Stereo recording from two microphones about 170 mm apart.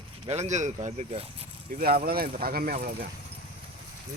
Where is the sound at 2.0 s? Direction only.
60° right (ahead or behind).